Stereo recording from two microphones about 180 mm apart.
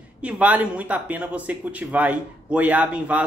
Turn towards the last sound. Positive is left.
turn(degrees=-10)  # may be behind; listen again after turning